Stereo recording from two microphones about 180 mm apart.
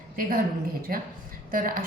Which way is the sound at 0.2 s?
55° right (ahead or behind).